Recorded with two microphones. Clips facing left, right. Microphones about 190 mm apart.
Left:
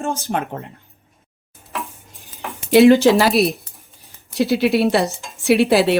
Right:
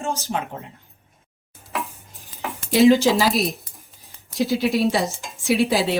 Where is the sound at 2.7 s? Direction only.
60° left (ahead or behind).